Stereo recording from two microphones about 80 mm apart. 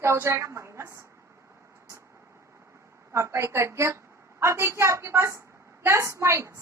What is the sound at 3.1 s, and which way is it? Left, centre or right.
A woman's voice, right.